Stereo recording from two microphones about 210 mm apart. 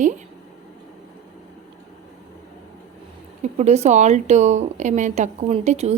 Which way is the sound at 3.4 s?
30° right (ahead or behind).